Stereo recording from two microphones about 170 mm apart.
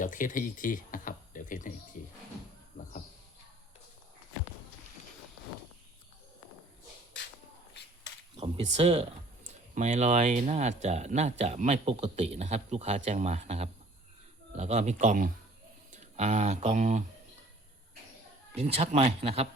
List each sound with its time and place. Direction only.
0.0 s speech: 50° left (ahead or behind)
8.4 s speech: 35° right (ahead or behind)
18.5 s speech: 35° right (ahead or behind)